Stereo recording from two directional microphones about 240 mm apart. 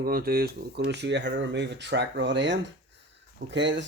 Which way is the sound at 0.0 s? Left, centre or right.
Right.